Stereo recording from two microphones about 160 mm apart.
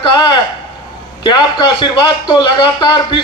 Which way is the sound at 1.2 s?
30° left (ahead or behind).